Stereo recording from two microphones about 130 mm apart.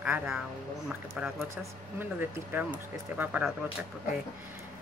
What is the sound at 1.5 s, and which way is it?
Speech, 15° right (ahead or behind).